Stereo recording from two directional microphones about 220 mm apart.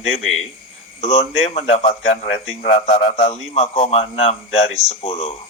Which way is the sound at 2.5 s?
30° left (ahead or behind).